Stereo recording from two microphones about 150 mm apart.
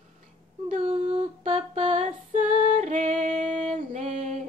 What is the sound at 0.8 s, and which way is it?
Female singing, 40° right (ahead or behind).